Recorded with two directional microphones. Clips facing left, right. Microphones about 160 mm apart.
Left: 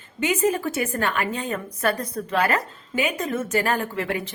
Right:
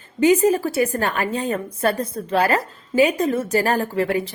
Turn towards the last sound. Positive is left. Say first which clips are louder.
# right 6 dB
turn(degrees=-35)  # may be behind; listen again after turning